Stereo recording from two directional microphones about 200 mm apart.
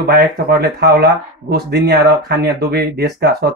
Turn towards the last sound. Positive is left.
turn(degrees=-55)  # may be behind; listen again after turning